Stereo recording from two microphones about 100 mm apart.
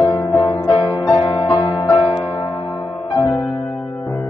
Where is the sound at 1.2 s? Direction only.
60° left (ahead or behind).